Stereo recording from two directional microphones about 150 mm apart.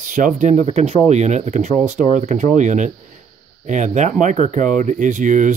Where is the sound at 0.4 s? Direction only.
50° right (ahead or behind).